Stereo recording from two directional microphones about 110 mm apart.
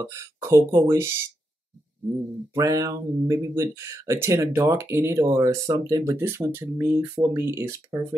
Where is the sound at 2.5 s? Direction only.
30° right (ahead or behind).